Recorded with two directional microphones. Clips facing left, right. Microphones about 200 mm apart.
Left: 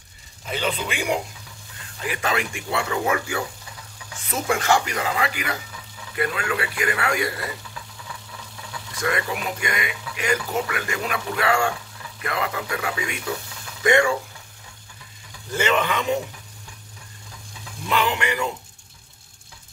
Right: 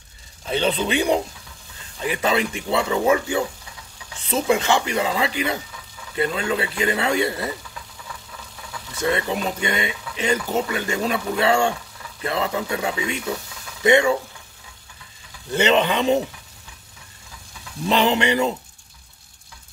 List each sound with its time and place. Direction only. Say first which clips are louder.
0.5 s speech: right 5 dB; 30° right (ahead or behind)
8.9 s speech: right 3 dB; 25° right (ahead or behind)
15.5 s speech: right 4 dB; 25° right (ahead or behind)
17.8 s speech: right 5 dB; 25° right (ahead or behind)